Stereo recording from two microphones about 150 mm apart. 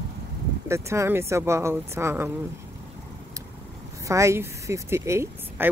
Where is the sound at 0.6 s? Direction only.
20° right (ahead or behind).